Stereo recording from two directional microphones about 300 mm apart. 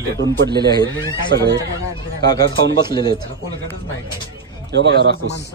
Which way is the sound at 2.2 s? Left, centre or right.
Centre.